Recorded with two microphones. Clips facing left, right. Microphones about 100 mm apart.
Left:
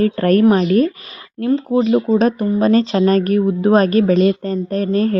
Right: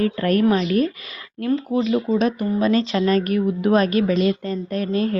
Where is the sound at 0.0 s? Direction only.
40° left (ahead or behind).